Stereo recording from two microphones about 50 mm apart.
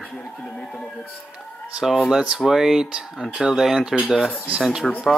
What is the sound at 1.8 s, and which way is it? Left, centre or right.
Speech, centre.